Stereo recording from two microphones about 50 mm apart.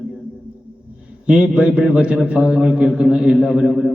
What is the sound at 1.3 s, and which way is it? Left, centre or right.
A man's voice, right.